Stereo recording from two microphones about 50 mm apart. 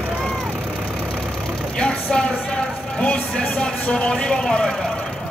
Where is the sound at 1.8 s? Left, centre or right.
Centre.